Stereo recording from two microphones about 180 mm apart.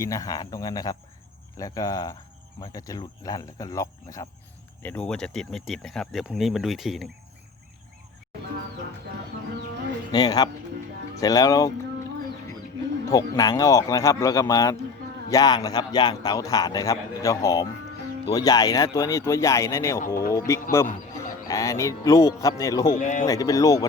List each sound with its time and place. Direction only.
0.0 s a man's voice: 20° left (ahead or behind)
4.8 s speech: 10° left (ahead or behind)
10.1 s a man's voice: 20° left (ahead or behind)
13.1 s a man's voice: 20° left (ahead or behind)
22.9 s speech: 45° left (ahead or behind)
23.2 s a man's voice: 20° left (ahead or behind)